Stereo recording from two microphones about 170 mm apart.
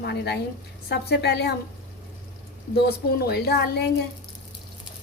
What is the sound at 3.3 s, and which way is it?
Speech, 75° left (ahead or behind).